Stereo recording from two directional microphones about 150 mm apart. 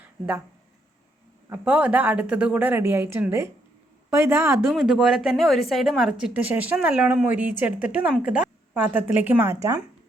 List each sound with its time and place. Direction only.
0.0 s a sound: 10° right (ahead or behind)
1.5 s speech: 10° right (ahead or behind)
4.7 s speech: 5° right (ahead or behind)